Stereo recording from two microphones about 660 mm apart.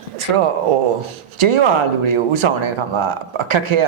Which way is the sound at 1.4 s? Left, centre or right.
Right.